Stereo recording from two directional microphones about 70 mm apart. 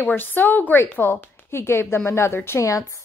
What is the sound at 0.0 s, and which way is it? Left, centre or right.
A woman's voice, left.